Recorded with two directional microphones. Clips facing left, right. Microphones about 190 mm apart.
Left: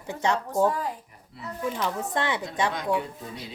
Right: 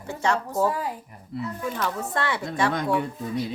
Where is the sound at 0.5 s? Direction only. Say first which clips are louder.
Left 1 dB; 5° right (ahead or behind).